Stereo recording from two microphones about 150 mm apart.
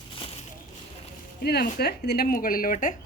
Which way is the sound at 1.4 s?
90° left.